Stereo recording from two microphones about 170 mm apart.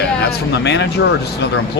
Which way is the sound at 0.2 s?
85° left.